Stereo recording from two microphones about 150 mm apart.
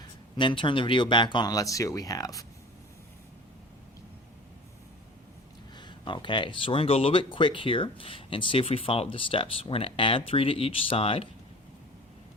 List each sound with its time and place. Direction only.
0.3 s speech: 35° left (ahead or behind)
5.7 s speech: 30° left (ahead or behind)